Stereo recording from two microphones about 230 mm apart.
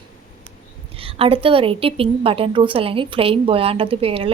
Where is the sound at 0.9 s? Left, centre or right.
Right.